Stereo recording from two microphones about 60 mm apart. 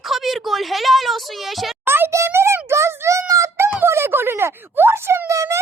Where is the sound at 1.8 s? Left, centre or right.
Right.